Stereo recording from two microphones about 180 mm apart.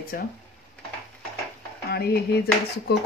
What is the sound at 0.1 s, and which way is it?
Speech, 55° left (ahead or behind).